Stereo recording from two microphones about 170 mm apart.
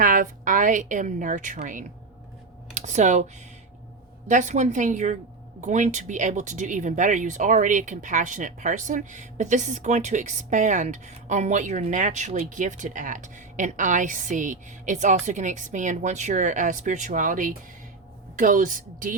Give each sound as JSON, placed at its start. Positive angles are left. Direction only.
{"t": 0.0, "sound": "a woman's voice", "side_deg": -50}
{"t": 4.3, "sound": "speech", "side_deg": -45}